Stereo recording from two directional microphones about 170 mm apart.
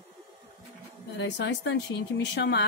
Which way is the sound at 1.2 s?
90° left.